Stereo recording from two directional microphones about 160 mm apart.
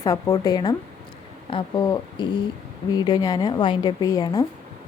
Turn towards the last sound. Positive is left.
turn(degrees=25)  # may be behind; listen again after turning